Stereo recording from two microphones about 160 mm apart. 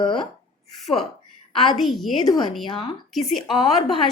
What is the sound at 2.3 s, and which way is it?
Speech, 30° left (ahead or behind).